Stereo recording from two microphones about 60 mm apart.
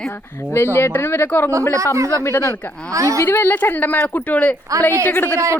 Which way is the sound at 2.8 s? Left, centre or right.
Right.